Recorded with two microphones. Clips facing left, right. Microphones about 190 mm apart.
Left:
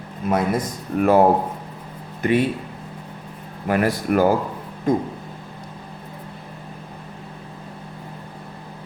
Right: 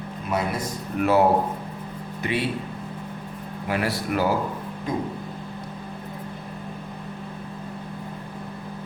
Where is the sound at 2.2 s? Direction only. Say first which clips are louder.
Left 7 dB; 50° left (ahead or behind).